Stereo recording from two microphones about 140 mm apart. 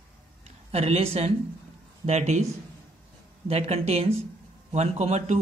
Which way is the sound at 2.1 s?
55° right (ahead or behind).